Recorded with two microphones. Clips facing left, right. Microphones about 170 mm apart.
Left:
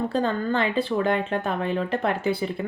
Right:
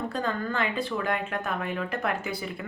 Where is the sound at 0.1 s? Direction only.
30° left (ahead or behind).